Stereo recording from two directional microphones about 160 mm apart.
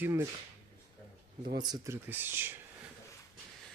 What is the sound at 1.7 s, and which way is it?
Speech, 15° right (ahead or behind).